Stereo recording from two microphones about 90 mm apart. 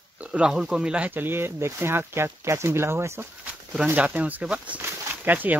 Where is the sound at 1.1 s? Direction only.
25° right (ahead or behind).